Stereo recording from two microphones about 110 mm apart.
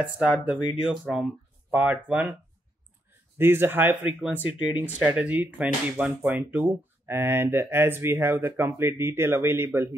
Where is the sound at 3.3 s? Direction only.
20° right (ahead or behind).